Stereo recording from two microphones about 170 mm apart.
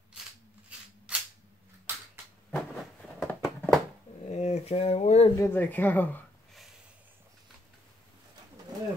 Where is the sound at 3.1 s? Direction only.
5° left (ahead or behind).